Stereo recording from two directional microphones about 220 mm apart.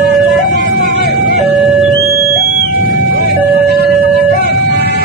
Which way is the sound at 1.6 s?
Centre (ahead or behind).